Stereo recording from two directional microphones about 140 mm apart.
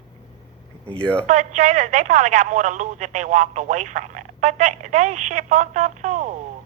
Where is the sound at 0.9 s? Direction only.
10° left (ahead or behind).